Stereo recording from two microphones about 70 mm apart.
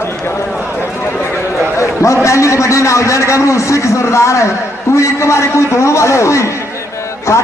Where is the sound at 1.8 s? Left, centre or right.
Left.